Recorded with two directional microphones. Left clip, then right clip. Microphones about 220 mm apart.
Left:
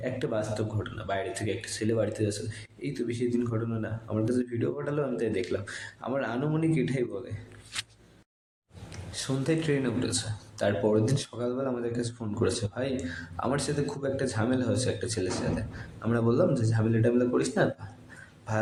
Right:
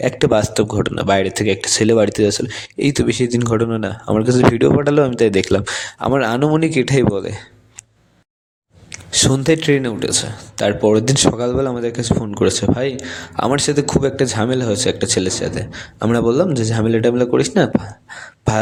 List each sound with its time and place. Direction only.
0.0 s speech: 45° right (ahead or behind)
8.9 s speech: 45° right (ahead or behind)